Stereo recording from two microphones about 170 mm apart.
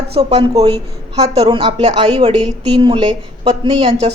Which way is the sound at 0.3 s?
35° right (ahead or behind).